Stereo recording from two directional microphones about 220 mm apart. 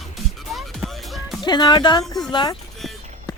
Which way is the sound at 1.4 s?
20° left (ahead or behind).